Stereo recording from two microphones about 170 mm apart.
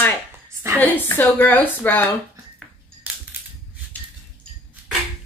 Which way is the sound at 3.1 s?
10° right (ahead or behind).